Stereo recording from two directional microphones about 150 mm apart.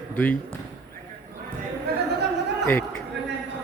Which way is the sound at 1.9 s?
90° right.